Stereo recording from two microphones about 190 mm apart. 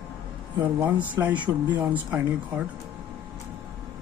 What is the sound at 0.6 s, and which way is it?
Speech, 10° right (ahead or behind).